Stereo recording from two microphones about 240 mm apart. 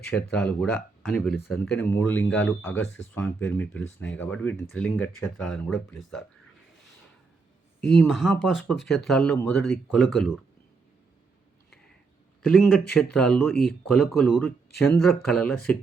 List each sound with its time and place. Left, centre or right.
0.1 s speech: centre
2.8 s speech: left
3.2 s speech: centre
7.8 s speech: centre
12.5 s speech: centre